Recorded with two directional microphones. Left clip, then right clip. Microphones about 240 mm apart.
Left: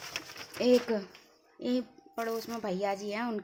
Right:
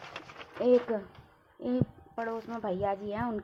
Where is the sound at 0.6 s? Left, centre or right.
Left.